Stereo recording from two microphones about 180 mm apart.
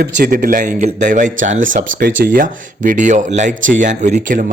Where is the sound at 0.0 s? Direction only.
50° right (ahead or behind).